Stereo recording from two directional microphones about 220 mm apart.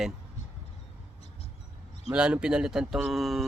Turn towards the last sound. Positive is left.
turn(degrees=0)  # may be behind; listen again after turning